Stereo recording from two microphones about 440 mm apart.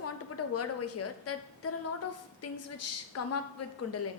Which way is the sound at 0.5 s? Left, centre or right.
Left.